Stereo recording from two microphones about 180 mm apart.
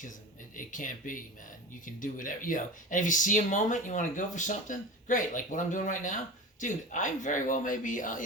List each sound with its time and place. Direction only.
0.5 s speech: 45° left (ahead or behind)